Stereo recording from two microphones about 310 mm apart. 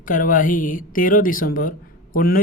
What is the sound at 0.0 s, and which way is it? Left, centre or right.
Speech, left.